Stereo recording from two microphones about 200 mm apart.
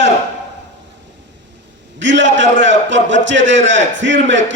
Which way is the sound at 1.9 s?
65° right (ahead or behind).